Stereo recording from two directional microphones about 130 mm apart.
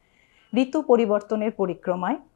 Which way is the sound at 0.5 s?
20° left (ahead or behind).